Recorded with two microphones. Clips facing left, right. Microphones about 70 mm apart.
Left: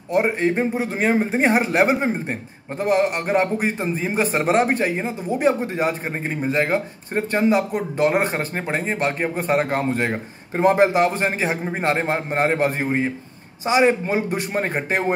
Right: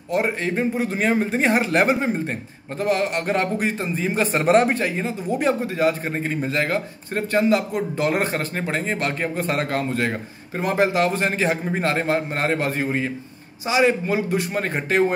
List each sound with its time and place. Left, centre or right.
0.1 s a man's voice: left
1.7 s speech: centre
2.8 s a man's voice: left
4.4 s a man's voice: centre
4.6 s a man's voice: left